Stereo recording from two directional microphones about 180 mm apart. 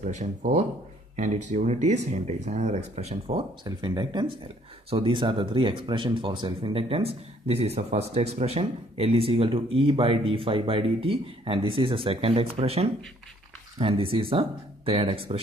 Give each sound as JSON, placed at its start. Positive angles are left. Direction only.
{"t": 0.0, "sound": "speech", "side_deg": -40}
{"t": 3.6, "sound": "speech", "side_deg": -25}